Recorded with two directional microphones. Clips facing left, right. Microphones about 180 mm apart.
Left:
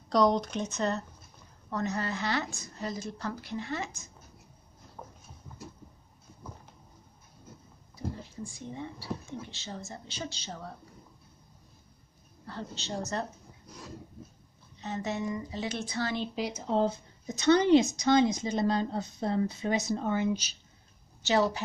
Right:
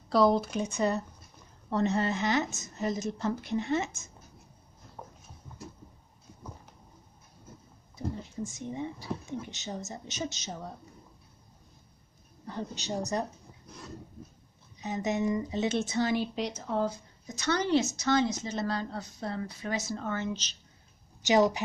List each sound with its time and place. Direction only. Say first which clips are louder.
0.1 s speech: right 1 dB; 5° right (ahead or behind)
1.7 s a woman's voice: right 5 dB; 25° right (ahead or behind)
5.0 s a sound: even; 10° right (ahead or behind)
7.9 s speech: right 2 dB; 20° right (ahead or behind)
12.4 s speech: right 3 dB; 15° right (ahead or behind)
14.8 s speech: right 3 dB; 15° right (ahead or behind)
16.3 s speech: even; 5° left (ahead or behind)
16.6 s a woman's voice: left 5 dB; 25° left (ahead or behind)
21.3 s speech: right 3 dB; 15° right (ahead or behind)